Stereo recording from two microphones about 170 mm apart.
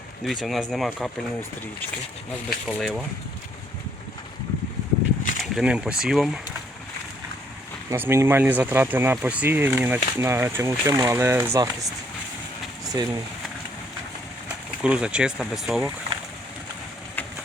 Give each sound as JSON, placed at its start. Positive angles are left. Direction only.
{"t": 0.3, "sound": "speech", "side_deg": 0}
{"t": 2.6, "sound": "speech", "side_deg": 0}
{"t": 5.4, "sound": "speech", "side_deg": -5}
{"t": 7.9, "sound": "speech", "side_deg": -15}
{"t": 12.8, "sound": "a sound", "side_deg": -20}
{"t": 14.4, "sound": "speech", "side_deg": -5}